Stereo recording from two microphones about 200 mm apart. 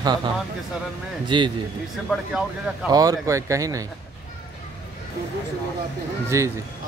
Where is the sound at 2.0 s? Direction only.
5° right (ahead or behind).